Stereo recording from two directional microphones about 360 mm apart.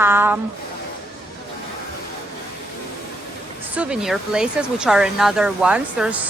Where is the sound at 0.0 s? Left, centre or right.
Centre.